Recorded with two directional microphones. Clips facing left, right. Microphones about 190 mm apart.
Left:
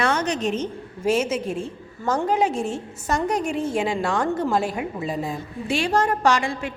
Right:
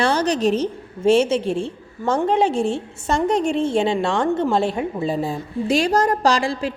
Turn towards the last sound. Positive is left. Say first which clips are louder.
# right 2 dB
turn(degrees=-35)  # may be behind; listen again after turning